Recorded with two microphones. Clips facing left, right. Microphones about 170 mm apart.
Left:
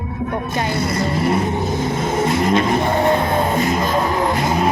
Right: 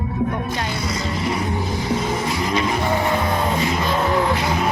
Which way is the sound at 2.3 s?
55° left (ahead or behind).